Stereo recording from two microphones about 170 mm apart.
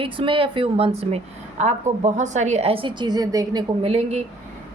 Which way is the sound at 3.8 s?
35° right (ahead or behind).